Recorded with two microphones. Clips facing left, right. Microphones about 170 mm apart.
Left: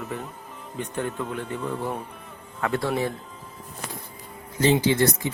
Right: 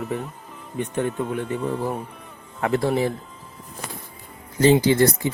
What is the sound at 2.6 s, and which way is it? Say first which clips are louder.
Speech: right 4 dB; 25° right (ahead or behind).